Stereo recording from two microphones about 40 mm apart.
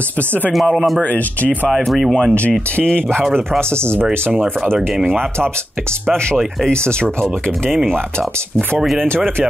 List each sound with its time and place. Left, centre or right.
0.5 s speech: centre
1.0 s speech: left
1.9 s speech: centre
3.7 s speech: right
6.6 s speech: left